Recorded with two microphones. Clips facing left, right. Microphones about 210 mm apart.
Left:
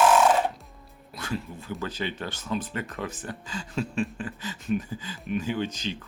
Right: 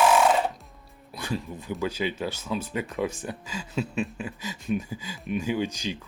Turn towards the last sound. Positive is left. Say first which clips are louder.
# right 1 dB
turn(degrees=-10)  # may be behind; listen again after turning